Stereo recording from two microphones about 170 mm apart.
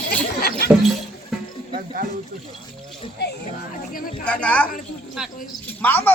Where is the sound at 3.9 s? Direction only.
55° left (ahead or behind).